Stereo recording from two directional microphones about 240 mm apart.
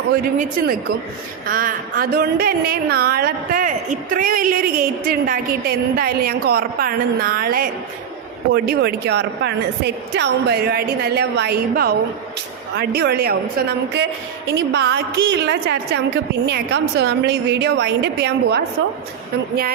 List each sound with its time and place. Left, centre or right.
0.3 s a woman's voice: right
14.5 s a woman's voice: right